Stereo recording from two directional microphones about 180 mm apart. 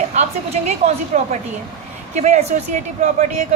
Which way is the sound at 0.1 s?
40° right (ahead or behind).